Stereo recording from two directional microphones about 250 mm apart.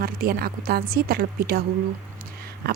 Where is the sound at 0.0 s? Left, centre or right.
Right.